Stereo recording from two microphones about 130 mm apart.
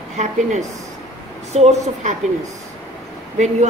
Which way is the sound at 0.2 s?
65° right (ahead or behind).